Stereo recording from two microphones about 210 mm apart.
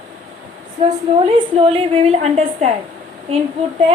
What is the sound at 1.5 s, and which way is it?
A woman's voice, 25° right (ahead or behind).